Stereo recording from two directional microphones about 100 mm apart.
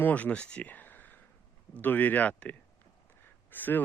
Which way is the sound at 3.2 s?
20° left (ahead or behind).